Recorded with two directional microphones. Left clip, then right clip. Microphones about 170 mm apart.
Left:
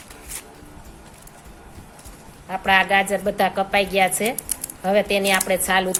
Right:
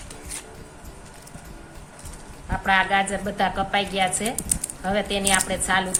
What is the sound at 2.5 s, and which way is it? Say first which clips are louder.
A woman's voice: left 3 dB; 40° left (ahead or behind).